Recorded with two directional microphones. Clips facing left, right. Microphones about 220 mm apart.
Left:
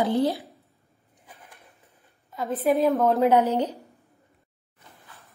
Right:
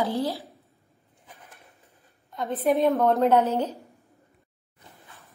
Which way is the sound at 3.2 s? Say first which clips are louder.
Left 1 dB; 10° left (ahead or behind).